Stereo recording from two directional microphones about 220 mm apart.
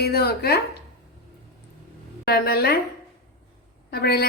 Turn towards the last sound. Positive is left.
turn(degrees=45)  # may be behind; listen again after turning